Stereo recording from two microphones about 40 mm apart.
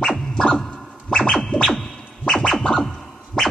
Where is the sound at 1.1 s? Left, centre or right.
Centre.